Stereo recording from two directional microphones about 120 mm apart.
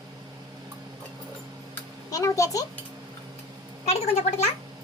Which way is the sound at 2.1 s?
30° left (ahead or behind).